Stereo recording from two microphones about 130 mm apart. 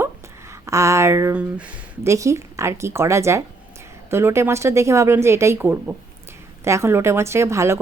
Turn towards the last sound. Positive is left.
turn(degrees=-20)  # may be behind; listen again after turning